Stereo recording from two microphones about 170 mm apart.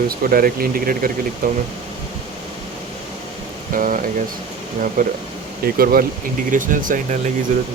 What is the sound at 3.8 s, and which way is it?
Speech, 50° right (ahead or behind).